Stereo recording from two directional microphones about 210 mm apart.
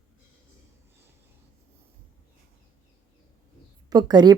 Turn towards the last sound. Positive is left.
turn(degrees=-20)  # may be behind; listen again after turning